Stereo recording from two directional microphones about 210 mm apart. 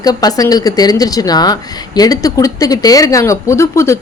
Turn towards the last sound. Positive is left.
turn(degrees=15)  # may be behind; listen again after turning